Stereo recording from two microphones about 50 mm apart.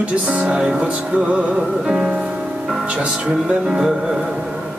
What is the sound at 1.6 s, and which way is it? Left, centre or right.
Speech, centre.